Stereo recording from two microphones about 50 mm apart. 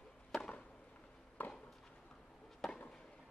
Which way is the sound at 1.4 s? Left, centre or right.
Left.